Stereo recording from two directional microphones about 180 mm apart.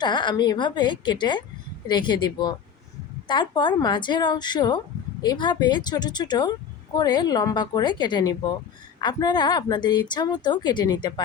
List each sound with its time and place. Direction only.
0.0 s speech: 25° left (ahead or behind)